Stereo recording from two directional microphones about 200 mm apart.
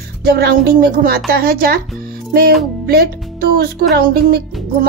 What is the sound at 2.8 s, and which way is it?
Speech, 50° right (ahead or behind).